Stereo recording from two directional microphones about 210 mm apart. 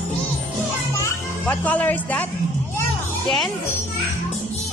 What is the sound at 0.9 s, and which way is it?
Music, 10° left (ahead or behind).